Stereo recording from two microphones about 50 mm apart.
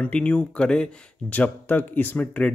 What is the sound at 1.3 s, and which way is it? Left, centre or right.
Speech, left.